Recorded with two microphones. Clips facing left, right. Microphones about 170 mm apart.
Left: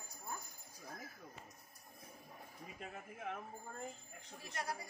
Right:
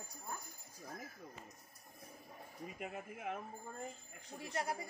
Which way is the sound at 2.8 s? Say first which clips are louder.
Right 2 dB; 10° right (ahead or behind).